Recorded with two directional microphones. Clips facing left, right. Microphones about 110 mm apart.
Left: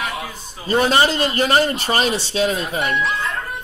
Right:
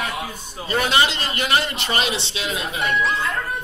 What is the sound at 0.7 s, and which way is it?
A man's voice, 35° left (ahead or behind).